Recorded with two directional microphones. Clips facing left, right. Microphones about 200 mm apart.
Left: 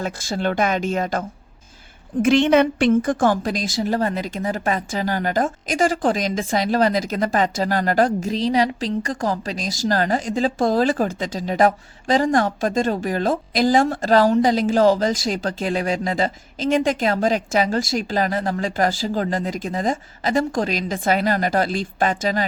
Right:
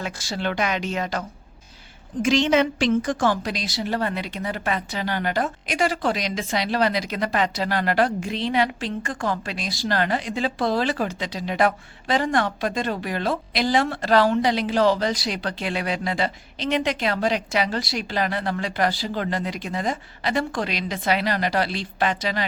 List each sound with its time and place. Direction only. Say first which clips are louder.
0.0 s speech: left 4 dB; 45° left (ahead or behind)
2.2 s speech: left 4 dB; 55° left (ahead or behind)